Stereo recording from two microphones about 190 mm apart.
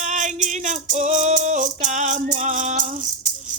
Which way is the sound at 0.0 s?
40° right (ahead or behind).